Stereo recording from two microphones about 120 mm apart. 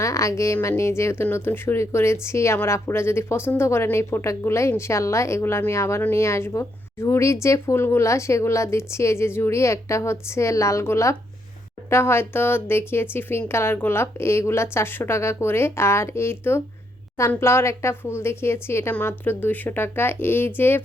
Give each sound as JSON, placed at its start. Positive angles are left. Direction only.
{"t": 0.0, "sound": "a woman's voice", "side_deg": 25}